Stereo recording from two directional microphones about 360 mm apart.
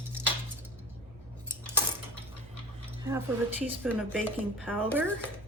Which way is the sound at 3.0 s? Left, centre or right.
Centre.